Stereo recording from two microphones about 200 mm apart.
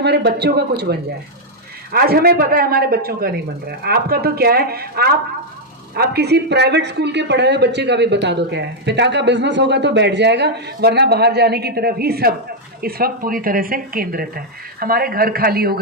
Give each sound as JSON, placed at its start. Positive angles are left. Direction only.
{"t": 0.0, "sound": "speech", "side_deg": -55}